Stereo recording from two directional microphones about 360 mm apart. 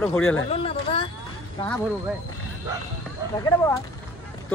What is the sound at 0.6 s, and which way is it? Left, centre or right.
Speech, centre.